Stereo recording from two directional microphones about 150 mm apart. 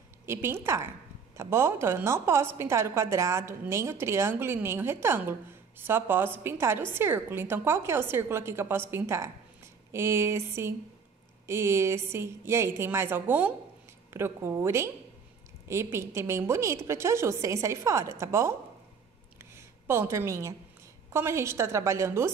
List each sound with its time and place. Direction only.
0.3 s a woman's voice: 15° right (ahead or behind)
19.3 s a sound: 15° right (ahead or behind)
21.1 s a woman's voice: 20° right (ahead or behind)